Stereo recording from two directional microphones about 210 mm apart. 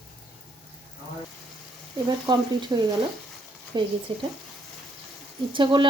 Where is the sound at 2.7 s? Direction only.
15° right (ahead or behind).